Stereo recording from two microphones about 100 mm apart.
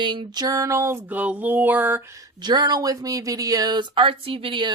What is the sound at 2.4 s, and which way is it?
Speech, 45° right (ahead or behind).